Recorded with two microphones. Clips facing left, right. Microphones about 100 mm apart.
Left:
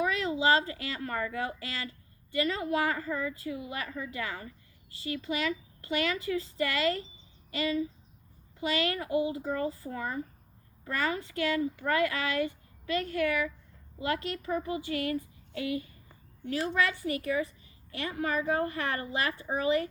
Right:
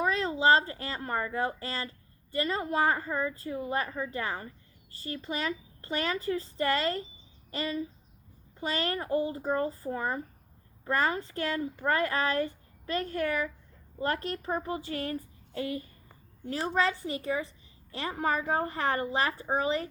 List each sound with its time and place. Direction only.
0.0 s a woman's voice: 35° right (ahead or behind)